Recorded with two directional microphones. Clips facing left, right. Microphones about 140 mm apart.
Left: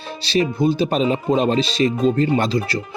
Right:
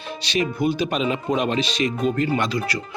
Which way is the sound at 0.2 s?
30° left (ahead or behind).